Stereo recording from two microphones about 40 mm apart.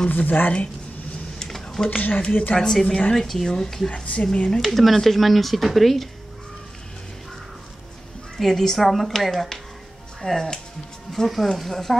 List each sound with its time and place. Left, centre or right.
0.1 s a woman's voice: left
1.4 s a sound: centre
1.9 s a woman's voice: left
2.5 s a woman's voice: centre
3.9 s a woman's voice: left
4.5 s speech: centre
8.4 s a woman's voice: centre